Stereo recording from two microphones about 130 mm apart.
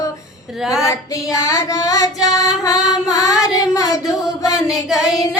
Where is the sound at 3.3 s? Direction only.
25° left (ahead or behind).